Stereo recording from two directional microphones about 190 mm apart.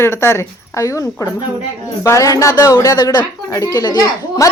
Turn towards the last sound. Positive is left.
turn(degrees=20)  # may be behind; listen again after turning